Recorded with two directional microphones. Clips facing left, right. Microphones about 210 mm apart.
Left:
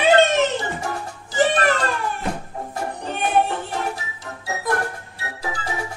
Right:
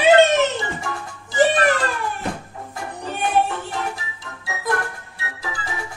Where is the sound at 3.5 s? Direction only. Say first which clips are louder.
Left 1 dB; 40° left (ahead or behind).